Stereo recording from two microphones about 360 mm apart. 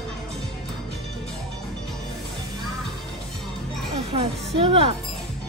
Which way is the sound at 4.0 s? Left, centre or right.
Centre.